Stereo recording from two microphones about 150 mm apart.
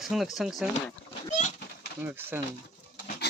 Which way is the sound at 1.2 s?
50° left (ahead or behind).